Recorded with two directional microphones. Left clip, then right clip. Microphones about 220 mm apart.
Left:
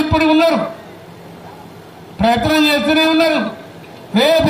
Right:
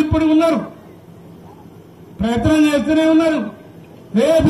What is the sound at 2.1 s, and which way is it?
A man's voice, 50° left (ahead or behind).